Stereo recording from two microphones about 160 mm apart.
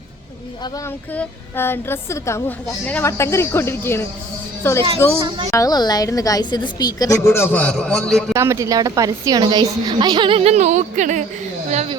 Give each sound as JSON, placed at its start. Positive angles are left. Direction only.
{"t": 0.9, "sound": "a woman's voice", "side_deg": 10}
{"t": 8.3, "sound": "a woman's voice", "side_deg": -15}